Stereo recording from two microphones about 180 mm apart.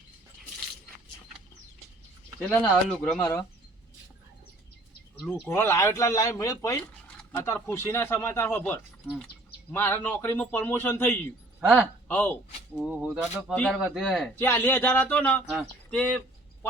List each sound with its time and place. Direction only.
2.5 s speech: centre (ahead or behind)
3.2 s speech: 15° left (ahead or behind)
5.5 s speech: 15° left (ahead or behind)
11.6 s speech: centre (ahead or behind)
12.0 s speech: 10° left (ahead or behind)
12.7 s speech: 5° right (ahead or behind)
13.5 s speech: 5° left (ahead or behind)
14.3 s speech: 10° left (ahead or behind)